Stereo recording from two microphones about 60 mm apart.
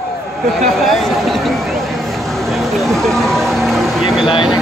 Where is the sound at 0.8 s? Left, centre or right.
Centre.